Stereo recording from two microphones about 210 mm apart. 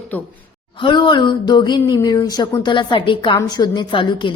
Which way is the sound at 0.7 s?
20° left (ahead or behind).